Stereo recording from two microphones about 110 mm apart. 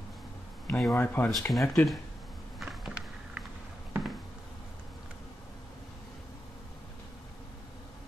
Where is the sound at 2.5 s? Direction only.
5° right (ahead or behind).